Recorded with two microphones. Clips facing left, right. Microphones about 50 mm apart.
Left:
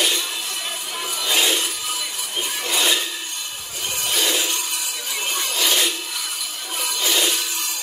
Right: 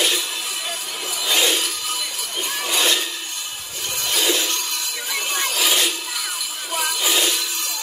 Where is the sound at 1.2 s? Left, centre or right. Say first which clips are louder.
Right 1 dB; centre.